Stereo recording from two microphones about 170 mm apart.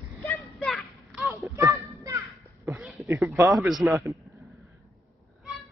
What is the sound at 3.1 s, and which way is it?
Speech, 15° right (ahead or behind).